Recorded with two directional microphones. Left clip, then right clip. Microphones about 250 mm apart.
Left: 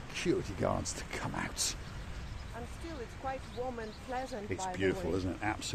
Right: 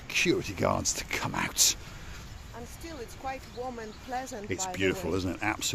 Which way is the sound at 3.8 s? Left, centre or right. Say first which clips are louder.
Right 3 dB; right.